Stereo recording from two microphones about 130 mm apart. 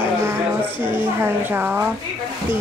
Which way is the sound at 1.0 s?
15° right (ahead or behind).